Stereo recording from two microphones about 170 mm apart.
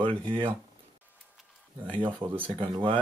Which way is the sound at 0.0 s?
30° right (ahead or behind).